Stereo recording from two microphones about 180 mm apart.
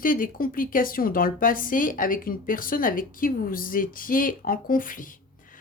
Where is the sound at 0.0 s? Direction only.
50° left (ahead or behind).